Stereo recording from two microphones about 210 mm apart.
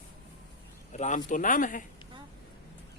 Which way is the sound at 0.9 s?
35° left (ahead or behind).